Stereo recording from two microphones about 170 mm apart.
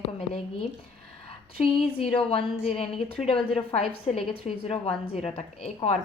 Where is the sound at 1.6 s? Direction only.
35° left (ahead or behind).